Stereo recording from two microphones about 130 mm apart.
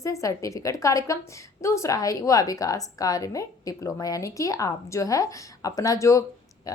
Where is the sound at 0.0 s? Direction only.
25° left (ahead or behind).